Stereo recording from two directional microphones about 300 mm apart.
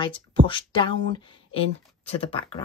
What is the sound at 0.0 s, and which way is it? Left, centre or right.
Speech, centre.